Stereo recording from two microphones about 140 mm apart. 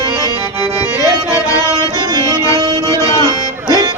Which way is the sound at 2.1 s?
25° right (ahead or behind).